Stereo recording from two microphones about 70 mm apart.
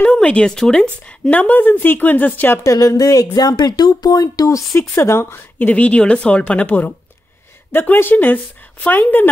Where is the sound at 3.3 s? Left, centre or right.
Left.